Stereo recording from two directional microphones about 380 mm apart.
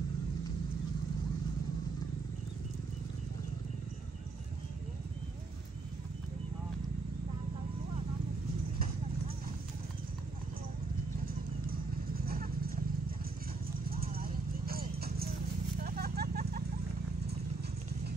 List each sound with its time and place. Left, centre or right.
13.8 s clip-clop: right